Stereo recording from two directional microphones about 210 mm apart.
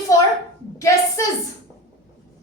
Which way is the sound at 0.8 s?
15° left (ahead or behind).